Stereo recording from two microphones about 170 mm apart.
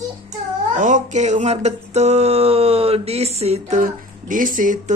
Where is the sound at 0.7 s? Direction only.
45° right (ahead or behind).